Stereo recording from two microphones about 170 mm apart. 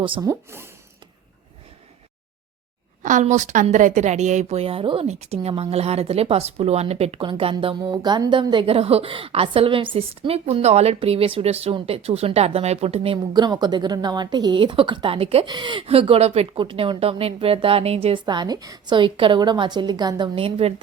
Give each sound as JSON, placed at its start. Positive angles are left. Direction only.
{"t": 0.0, "sound": "a woman's voice", "side_deg": -30}
{"t": 0.3, "sound": "speech", "side_deg": -15}
{"t": 3.0, "sound": "a woman's voice", "side_deg": -50}